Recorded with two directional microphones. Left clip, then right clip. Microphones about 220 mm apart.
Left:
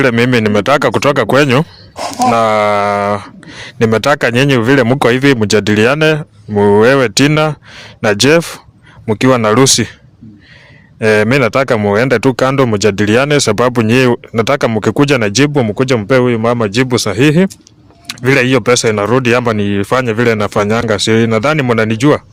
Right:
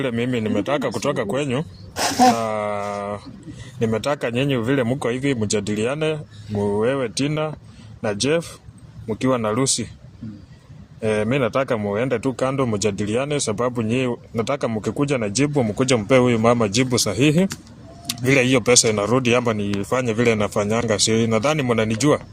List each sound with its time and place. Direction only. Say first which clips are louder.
0.0 s speech: left 13 dB; 45° left (ahead or behind)
2.0 s speech: left 2 dB; 15° right (ahead or behind)
2.3 s speech: left 13 dB; 55° left (ahead or behind)
11.0 s speech: left 11 dB; 50° left (ahead or behind)